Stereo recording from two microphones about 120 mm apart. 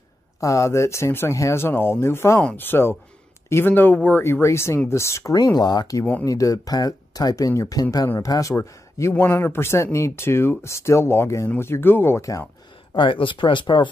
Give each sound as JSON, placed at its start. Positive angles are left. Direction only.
{"t": 0.4, "sound": "speech", "side_deg": 25}
{"t": 12.9, "sound": "speech", "side_deg": 45}